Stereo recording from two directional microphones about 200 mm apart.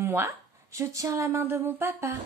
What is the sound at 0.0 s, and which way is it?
A woman's voice, 10° right (ahead or behind).